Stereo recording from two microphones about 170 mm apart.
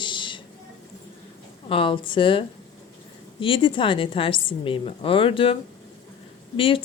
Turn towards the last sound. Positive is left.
turn(degrees=30)  # may be behind; listen again after turning